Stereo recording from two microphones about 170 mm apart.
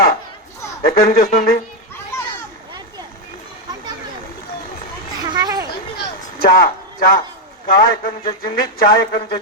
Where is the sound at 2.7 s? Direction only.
25° right (ahead or behind).